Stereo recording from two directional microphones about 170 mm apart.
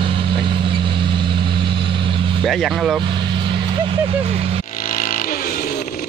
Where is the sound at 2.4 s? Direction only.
Centre (ahead or behind).